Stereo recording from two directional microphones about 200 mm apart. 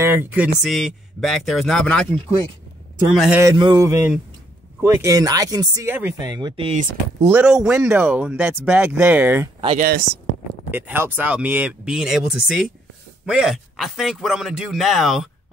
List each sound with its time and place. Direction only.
0.0 s speech: 10° right (ahead or behind)
3.4 s speech: 20° right (ahead or behind); by 7.2 s 35° right (ahead or behind)
7.2 s speech: 5° right (ahead or behind)
9.8 s speech: 45° right (ahead or behind)
10.7 s speech: 10° right (ahead or behind)